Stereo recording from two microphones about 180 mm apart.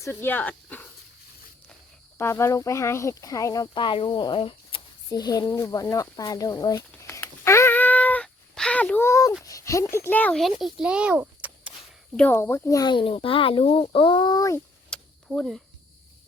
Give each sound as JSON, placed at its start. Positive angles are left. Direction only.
{"t": 0.0, "sound": "speech", "side_deg": 10}
{"t": 2.1, "sound": "speech", "side_deg": 15}
{"t": 9.4, "sound": "a sound", "side_deg": 15}
{"t": 9.9, "sound": "a child's voice", "side_deg": 10}
{"t": 12.1, "sound": "speech", "side_deg": 10}
{"t": 13.1, "sound": "speech", "side_deg": 30}
{"t": 14.8, "sound": "a sound", "side_deg": 5}